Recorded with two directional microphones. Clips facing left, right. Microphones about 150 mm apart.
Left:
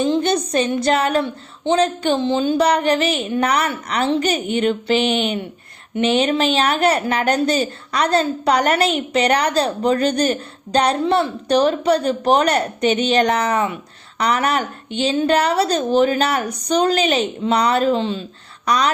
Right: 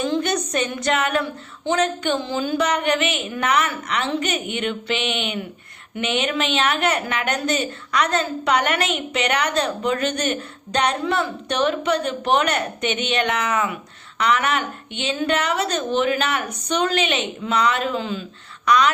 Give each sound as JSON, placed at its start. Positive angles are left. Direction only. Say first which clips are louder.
{"t": 0.0, "sound": "a woman's voice", "louder": "left 4 dB", "side_deg": 30}